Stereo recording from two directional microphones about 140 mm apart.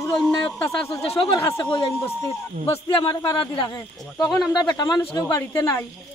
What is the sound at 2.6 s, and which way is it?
Speech, 35° left (ahead or behind).